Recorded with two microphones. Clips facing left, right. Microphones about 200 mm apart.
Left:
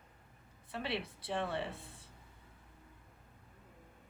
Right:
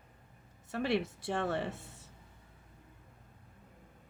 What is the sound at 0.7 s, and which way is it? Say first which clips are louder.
Speech: right 7 dB; 50° right (ahead or behind).